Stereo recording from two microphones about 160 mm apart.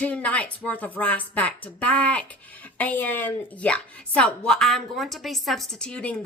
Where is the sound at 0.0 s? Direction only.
10° left (ahead or behind).